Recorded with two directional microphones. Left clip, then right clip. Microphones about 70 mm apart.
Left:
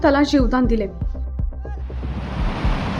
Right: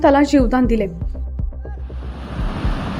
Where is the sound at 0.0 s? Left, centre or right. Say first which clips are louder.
Right 3 dB; right.